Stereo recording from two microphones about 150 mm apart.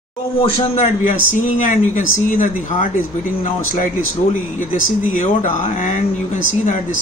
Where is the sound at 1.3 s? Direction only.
60° left (ahead or behind).